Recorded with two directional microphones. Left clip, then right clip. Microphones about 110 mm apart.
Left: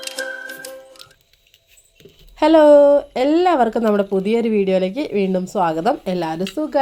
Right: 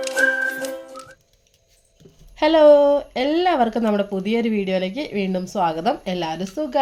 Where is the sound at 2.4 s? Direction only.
35° left (ahead or behind).